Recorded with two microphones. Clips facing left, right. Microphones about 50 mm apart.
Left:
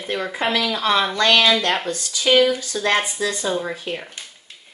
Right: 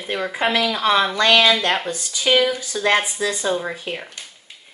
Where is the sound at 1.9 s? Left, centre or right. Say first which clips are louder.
Left 1 dB; centre.